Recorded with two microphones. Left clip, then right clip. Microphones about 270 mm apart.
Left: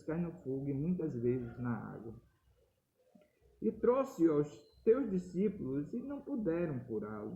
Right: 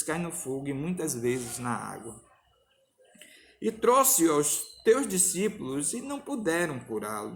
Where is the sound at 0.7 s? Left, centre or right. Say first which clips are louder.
Right 6 dB; right.